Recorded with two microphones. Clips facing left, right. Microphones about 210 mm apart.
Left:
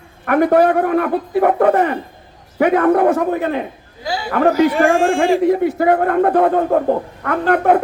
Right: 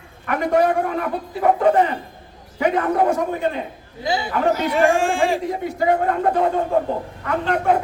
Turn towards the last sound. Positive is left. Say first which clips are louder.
# left 5 dB
turn(degrees=55)  # may be behind; listen again after turning